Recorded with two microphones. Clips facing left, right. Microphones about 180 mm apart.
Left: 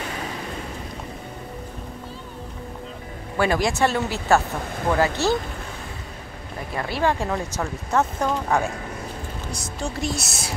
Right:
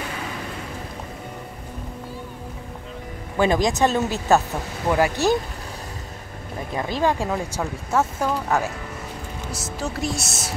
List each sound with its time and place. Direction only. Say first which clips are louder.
3.3 s speech: right 2 dB; 20° right (ahead or behind)
6.8 s speech: right 1 dB; 15° right (ahead or behind); by 10.5 s centre (ahead or behind)